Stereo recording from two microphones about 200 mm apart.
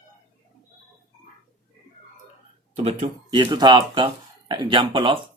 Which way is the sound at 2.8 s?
25° right (ahead or behind).